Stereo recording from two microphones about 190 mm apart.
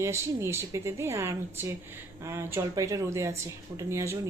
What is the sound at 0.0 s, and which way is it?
A woman's voice, 15° right (ahead or behind).